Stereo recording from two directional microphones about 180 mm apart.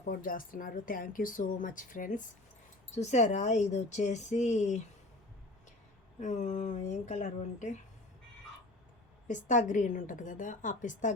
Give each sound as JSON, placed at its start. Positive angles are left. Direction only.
{"t": 0.0, "sound": "a woman's voice", "side_deg": 50}
{"t": 6.1, "sound": "speech", "side_deg": 40}
{"t": 9.2, "sound": "a woman's voice", "side_deg": 45}